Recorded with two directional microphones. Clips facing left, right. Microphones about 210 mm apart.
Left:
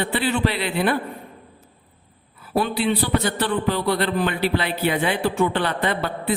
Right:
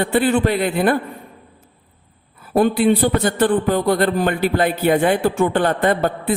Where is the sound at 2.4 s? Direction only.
45° right (ahead or behind).